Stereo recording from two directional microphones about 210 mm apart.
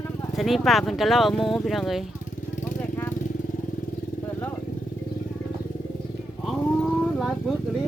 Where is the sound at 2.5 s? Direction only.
40° left (ahead or behind).